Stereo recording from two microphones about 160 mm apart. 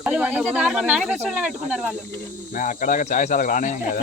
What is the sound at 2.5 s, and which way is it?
Speech, 55° left (ahead or behind).